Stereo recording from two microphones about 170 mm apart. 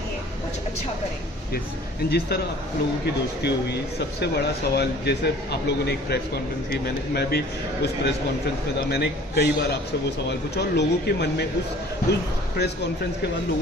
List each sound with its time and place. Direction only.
2.0 s speech: 70° left (ahead or behind)
4.2 s speech: 75° left (ahead or behind)